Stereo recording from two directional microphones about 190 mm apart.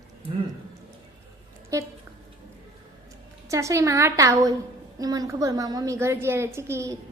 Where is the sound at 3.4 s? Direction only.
15° right (ahead or behind).